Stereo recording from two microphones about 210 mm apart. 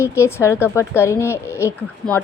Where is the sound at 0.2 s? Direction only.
10° left (ahead or behind).